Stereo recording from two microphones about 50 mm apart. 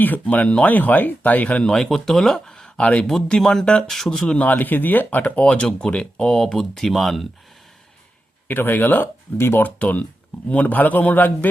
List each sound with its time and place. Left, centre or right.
0.0 s speech: left
1.6 s speech: centre
2.8 s speech: left
3.1 s speech: centre
4.4 s speech: left
5.3 s speech: left; by 7.3 s centre
8.4 s speech: left
9.6 s speech: left